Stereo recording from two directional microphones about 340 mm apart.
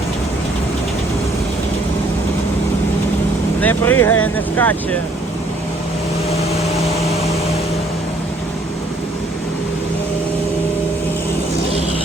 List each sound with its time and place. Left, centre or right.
3.6 s speech: centre